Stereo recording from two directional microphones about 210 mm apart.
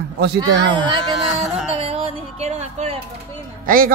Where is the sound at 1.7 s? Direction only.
25° right (ahead or behind).